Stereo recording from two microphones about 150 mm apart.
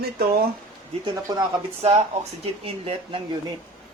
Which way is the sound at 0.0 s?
90° right.